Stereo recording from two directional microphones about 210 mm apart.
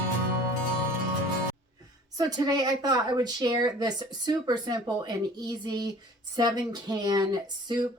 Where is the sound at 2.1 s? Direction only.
20° right (ahead or behind).